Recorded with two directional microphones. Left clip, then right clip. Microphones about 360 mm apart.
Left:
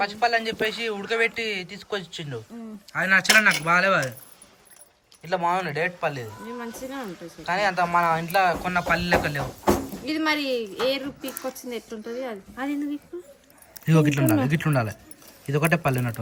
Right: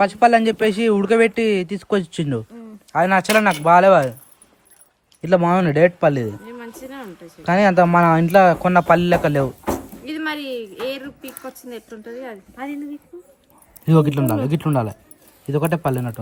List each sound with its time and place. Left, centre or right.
0.0 s speech: centre
5.2 s speech: right
6.4 s a woman's voice: centre
7.4 s speech: right
10.1 s a woman's voice: centre